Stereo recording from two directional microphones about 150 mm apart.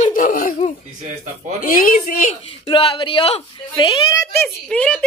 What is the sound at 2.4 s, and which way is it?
Speech, 35° left (ahead or behind).